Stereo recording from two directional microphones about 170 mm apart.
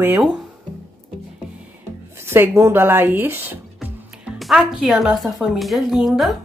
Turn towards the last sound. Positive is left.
turn(degrees=0)  # may be behind; listen again after turning